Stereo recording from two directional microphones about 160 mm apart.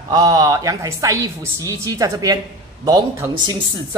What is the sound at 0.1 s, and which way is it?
A woman's voice, 25° right (ahead or behind).